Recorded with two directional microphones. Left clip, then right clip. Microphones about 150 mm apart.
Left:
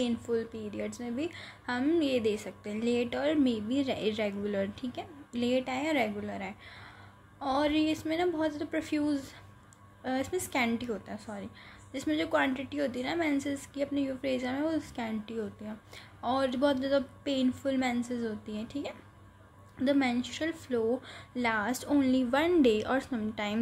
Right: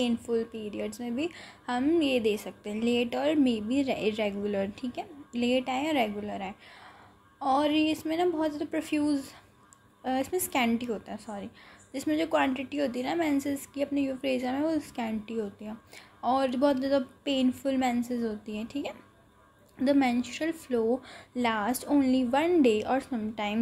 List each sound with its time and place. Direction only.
0.0 s a woman's voice: 10° right (ahead or behind)